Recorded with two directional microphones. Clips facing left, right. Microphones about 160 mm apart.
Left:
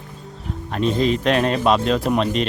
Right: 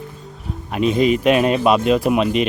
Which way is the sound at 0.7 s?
10° right (ahead or behind).